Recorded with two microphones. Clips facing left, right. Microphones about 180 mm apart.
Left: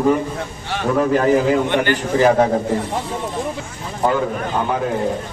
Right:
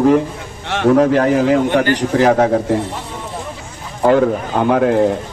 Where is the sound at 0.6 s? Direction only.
75° right (ahead or behind).